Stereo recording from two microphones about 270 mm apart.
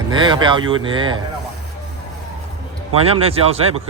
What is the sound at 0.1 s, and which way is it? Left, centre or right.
Speech, centre.